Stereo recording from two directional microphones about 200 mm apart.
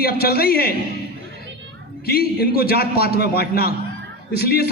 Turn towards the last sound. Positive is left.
turn(degrees=50)  # may be behind; listen again after turning